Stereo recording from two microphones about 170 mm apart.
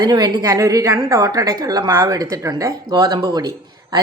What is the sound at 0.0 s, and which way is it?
A woman's voice, 25° right (ahead or behind).